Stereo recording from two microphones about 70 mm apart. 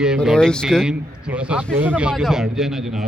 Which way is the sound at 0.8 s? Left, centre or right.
Centre.